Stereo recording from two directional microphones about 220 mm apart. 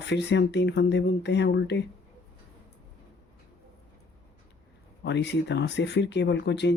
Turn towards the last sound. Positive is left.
turn(degrees=50)  # may be behind; listen again after turning